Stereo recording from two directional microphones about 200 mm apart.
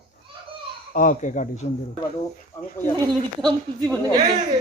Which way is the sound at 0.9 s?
40° left (ahead or behind).